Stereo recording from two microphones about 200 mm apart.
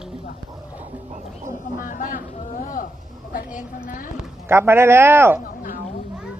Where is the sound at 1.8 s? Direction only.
45° left (ahead or behind).